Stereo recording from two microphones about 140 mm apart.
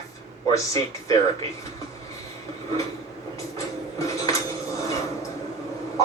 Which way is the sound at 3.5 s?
20° left (ahead or behind).